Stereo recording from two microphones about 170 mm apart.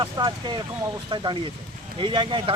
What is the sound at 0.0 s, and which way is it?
Speech, 25° right (ahead or behind).